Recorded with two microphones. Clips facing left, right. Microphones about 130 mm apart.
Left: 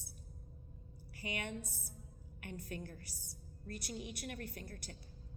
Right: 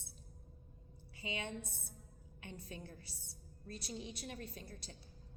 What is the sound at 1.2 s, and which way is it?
A woman's voice, 25° right (ahead or behind).